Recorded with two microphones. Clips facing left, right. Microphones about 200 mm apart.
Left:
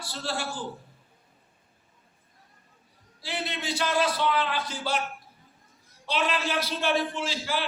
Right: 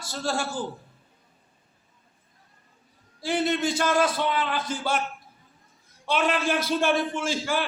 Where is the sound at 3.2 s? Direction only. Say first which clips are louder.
Right 9 dB; 50° right (ahead or behind).